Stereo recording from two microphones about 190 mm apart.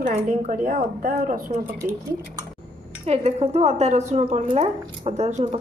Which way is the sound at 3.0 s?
35° right (ahead or behind).